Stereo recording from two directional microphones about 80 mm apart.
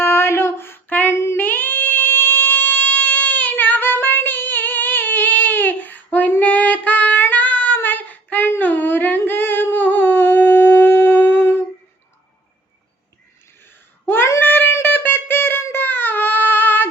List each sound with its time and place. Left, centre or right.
0.0 s female singing: left
1.1 s singing: left
14.0 s a sound: left